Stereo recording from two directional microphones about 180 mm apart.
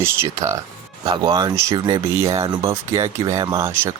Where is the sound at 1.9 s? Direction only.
30° right (ahead or behind).